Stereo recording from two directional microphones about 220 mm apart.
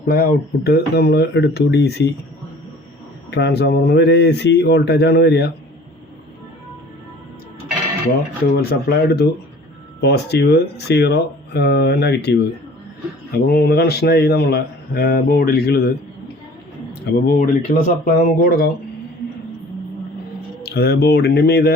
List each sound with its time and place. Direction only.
0.1 s a man's voice: 45° left (ahead or behind)
3.3 s a man's voice: 50° left (ahead or behind)
8.5 s a man's voice: 45° left (ahead or behind)
17.1 s speech: 40° left (ahead or behind)
20.6 s a man's voice: 45° left (ahead or behind)